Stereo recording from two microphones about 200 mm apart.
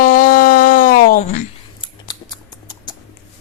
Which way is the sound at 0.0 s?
40° left (ahead or behind).